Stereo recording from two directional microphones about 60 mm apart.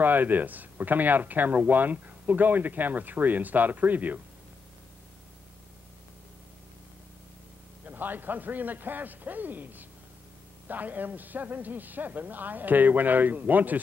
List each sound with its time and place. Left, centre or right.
0.0 s speech: right
7.8 s a man's voice: right